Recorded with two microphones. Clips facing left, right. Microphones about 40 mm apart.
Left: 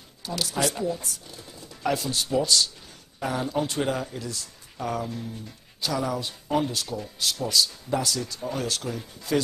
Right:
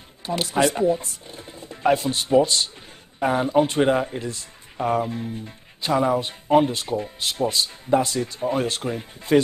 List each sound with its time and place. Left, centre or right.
0.3 s speech: right